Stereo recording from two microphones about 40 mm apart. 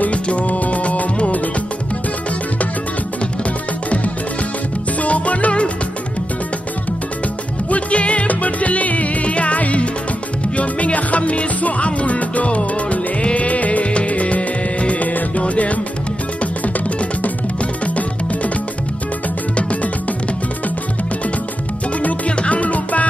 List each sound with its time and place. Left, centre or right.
0.0 s music: left
5.0 s music: left
7.7 s music: left
17.8 s music: left
19.5 s music: left
22.4 s music: left